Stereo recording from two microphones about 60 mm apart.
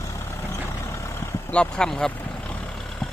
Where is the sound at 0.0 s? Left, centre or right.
Left.